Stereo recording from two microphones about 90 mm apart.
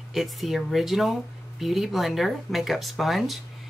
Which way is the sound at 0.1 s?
Centre (ahead or behind).